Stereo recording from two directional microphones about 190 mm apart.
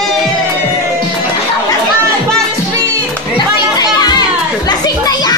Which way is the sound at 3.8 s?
20° left (ahead or behind).